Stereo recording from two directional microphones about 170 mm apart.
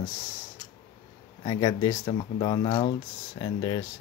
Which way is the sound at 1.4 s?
25° left (ahead or behind).